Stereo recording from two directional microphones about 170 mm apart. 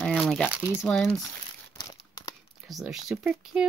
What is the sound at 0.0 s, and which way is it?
Crumpling, centre (ahead or behind).